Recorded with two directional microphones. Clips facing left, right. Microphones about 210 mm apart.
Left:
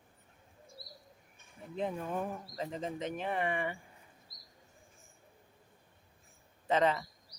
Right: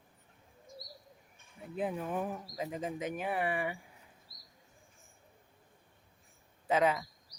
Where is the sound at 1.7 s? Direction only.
5° right (ahead or behind).